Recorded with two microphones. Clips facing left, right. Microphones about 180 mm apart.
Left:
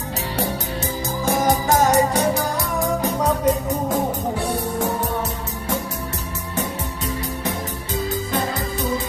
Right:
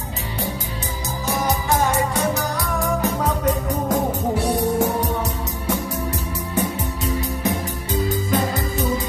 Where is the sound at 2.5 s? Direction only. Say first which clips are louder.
Left 1 dB; 25° left (ahead or behind).